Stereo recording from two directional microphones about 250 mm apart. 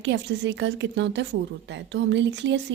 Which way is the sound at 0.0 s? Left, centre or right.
Right.